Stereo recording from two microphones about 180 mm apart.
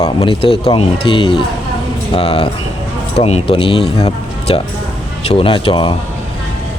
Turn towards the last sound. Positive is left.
turn(degrees=30)  # may be behind; listen again after turning